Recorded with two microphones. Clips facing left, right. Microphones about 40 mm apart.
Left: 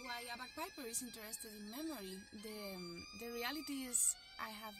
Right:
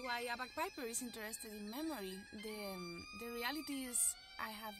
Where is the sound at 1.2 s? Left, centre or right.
Right.